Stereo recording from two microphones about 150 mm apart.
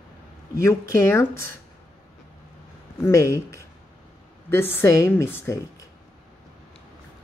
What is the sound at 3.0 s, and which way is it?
Speech, 20° left (ahead or behind).